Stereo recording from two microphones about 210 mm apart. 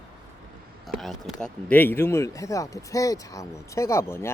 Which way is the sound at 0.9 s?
Centre (ahead or behind).